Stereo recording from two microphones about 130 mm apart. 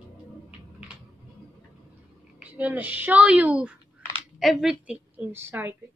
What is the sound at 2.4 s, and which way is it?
Speech, 10° right (ahead or behind).